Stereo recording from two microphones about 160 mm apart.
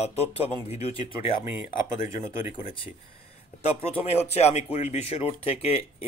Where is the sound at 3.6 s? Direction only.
40° left (ahead or behind).